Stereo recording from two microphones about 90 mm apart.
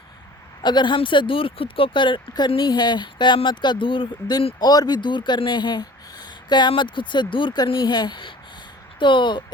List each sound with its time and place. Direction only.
0.6 s speech: 55° left (ahead or behind)
4.6 s speech: 45° left (ahead or behind); by 9.4 s 60° left (ahead or behind)